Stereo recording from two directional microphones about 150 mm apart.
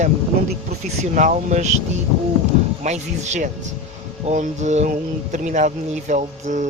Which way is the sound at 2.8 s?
50° right (ahead or behind).